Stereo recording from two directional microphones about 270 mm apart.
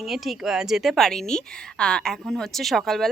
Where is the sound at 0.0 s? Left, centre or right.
Centre.